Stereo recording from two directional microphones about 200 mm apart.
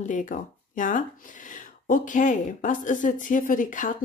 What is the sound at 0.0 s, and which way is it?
Speech, 40° left (ahead or behind).